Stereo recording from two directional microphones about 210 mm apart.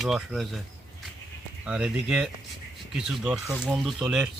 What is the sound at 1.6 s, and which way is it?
Speech, 5° right (ahead or behind).